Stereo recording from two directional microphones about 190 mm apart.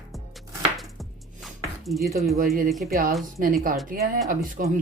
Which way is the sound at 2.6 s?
Centre (ahead or behind).